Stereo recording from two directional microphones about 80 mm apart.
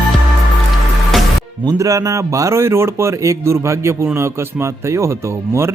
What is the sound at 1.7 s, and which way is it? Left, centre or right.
A man's voice, right.